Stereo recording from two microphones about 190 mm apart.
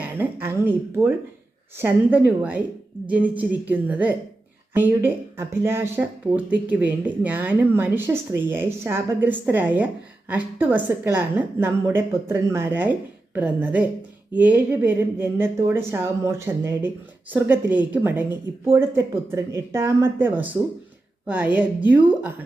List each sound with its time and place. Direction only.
0.0 s speech: 10° right (ahead or behind)